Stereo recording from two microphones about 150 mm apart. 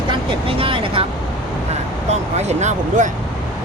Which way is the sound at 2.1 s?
50° right (ahead or behind).